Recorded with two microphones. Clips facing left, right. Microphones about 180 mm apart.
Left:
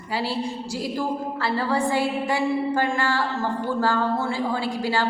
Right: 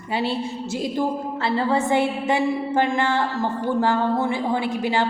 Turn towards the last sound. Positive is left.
turn(degrees=-20)  # may be behind; listen again after turning